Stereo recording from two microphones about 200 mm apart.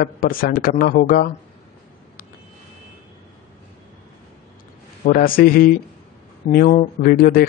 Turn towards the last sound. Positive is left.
turn(degrees=50)  # may be behind; listen again after turning